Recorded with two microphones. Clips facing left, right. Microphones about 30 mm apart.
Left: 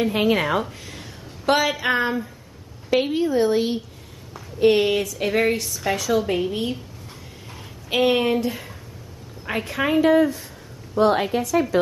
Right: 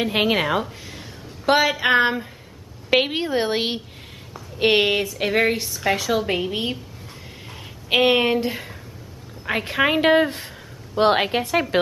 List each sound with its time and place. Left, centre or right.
0.0 s speech: right
0.3 s a woman's voice: centre
1.8 s a woman's voice: right
2.9 s a woman's voice: right
7.9 s a woman's voice: right
9.8 s a woman's voice: right